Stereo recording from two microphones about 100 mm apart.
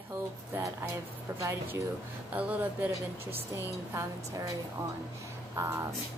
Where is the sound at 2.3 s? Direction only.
15° right (ahead or behind).